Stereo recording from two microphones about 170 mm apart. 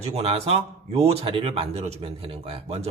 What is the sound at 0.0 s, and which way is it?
Speech, 35° right (ahead or behind).